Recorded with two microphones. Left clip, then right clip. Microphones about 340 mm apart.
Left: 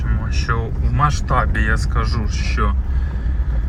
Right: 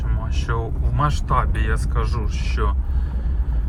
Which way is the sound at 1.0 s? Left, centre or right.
Centre.